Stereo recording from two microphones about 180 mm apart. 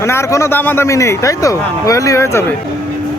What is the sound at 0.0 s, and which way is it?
Speech, 15° left (ahead or behind).